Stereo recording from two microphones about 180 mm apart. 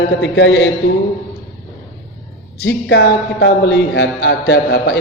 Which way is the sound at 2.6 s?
70° left (ahead or behind).